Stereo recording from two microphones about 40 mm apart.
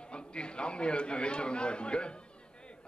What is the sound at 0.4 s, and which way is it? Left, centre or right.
A man's voice, left.